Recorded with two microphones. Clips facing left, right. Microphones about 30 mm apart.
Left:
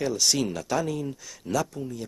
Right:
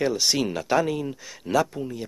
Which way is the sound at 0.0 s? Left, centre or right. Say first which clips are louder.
Right 2 dB; right.